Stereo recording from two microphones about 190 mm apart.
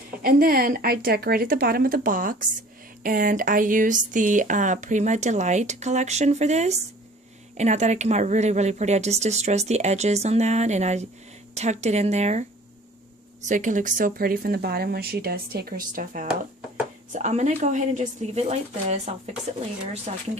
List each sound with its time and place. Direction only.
0.2 s speech: 50° right (ahead or behind)
13.5 s speech: 40° right (ahead or behind)